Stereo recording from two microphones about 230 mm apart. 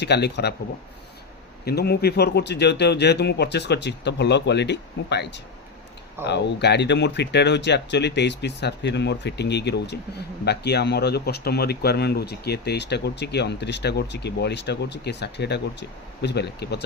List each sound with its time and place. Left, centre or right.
0.0 s speech: left
1.6 s speech: left